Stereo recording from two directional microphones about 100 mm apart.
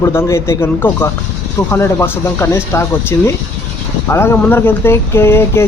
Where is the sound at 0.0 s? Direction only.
25° left (ahead or behind).